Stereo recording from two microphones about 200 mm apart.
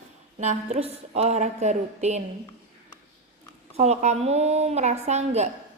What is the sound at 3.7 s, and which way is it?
A woman's voice, 35° right (ahead or behind).